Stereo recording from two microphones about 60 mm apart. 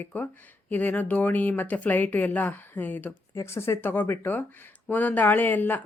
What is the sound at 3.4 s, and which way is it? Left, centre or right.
A woman's voice, left.